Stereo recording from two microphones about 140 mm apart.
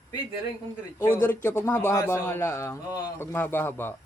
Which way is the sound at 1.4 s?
15° left (ahead or behind).